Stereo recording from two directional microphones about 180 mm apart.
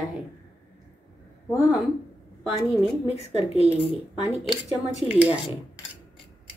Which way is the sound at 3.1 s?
35° left (ahead or behind).